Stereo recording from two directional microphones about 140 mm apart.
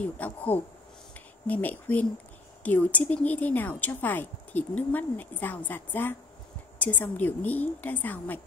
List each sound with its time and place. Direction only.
0.0 s speech: 10° left (ahead or behind)